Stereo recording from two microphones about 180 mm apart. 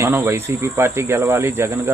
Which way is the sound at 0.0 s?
10° right (ahead or behind).